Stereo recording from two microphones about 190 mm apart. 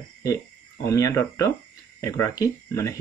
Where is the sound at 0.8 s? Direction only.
15° left (ahead or behind).